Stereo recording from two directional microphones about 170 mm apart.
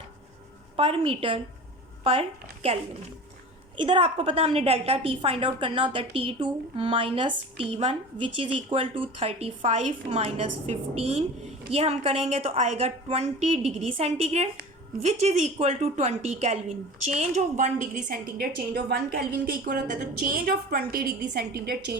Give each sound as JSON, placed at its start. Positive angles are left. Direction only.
{"t": 0.8, "sound": "a woman's voice", "side_deg": -35}
{"t": 3.8, "sound": "a woman's voice", "side_deg": -30}